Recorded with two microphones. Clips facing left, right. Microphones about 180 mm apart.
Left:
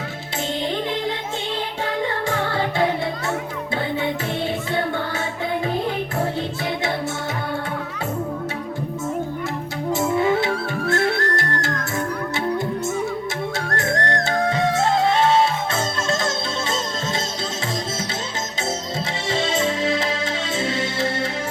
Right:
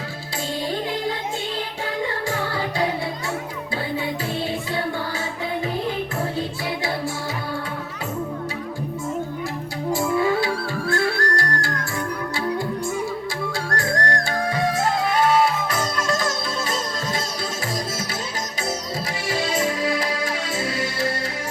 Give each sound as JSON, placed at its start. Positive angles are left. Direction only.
{"t": 2.3, "sound": "music", "side_deg": 25}
{"t": 9.9, "sound": "music", "side_deg": 20}
{"t": 13.7, "sound": "music", "side_deg": 20}
{"t": 19.3, "sound": "music", "side_deg": 25}